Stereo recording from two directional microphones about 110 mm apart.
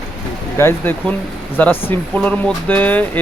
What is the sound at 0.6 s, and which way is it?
Speech, 20° left (ahead or behind).